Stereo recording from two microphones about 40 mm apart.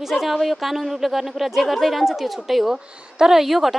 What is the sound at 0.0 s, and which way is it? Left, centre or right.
Speech, centre.